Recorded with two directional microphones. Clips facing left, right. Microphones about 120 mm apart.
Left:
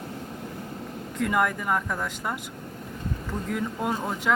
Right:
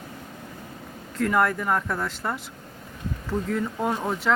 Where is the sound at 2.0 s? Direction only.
10° left (ahead or behind).